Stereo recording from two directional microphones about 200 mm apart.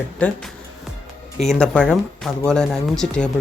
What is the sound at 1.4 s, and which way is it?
Speech, 5° left (ahead or behind).